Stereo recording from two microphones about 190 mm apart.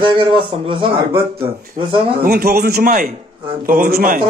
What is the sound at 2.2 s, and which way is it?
Speech, 55° right (ahead or behind).